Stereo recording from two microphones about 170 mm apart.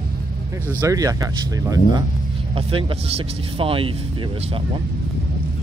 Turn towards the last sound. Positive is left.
turn(degrees=-30)  # may be behind; listen again after turning